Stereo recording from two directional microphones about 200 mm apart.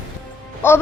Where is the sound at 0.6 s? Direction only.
10° left (ahead or behind).